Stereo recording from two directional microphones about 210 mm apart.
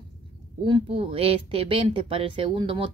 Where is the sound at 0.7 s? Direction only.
25° right (ahead or behind).